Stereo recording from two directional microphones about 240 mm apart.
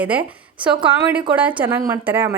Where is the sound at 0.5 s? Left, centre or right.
Centre.